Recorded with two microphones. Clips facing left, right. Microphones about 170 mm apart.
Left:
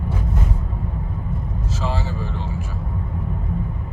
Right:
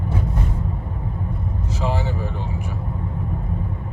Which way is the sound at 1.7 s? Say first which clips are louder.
Right 2 dB; 15° right (ahead or behind).